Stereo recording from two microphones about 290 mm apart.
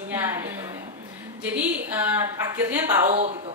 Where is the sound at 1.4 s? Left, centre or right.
Centre.